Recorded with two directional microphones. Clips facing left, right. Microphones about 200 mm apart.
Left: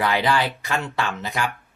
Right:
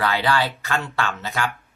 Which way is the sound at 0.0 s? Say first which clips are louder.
Even; 20° left (ahead or behind).